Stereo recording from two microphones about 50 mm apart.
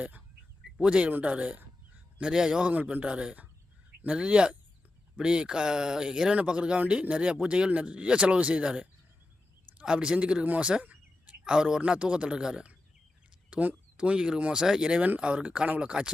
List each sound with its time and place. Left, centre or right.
0.8 s speech: right
1.5 s fowl: right
2.2 s speech: centre
10.4 s speech: right
10.7 s bird: right
11.8 s speech: right
13.5 s speech: right
13.9 s speech: right